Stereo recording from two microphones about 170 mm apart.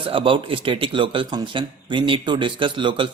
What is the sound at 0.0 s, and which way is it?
A man's voice, 30° right (ahead or behind).